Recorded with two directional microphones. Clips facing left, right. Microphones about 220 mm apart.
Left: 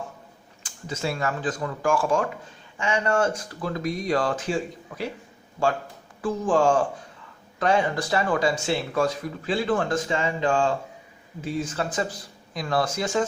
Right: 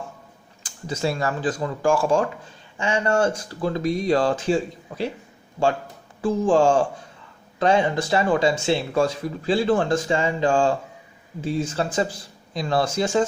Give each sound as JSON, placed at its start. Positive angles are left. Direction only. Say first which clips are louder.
{"t": 0.6, "sound": "speech", "louder": "right 4 dB", "side_deg": -35}
{"t": 6.2, "sound": "speech", "louder": "right 3 dB", "side_deg": -25}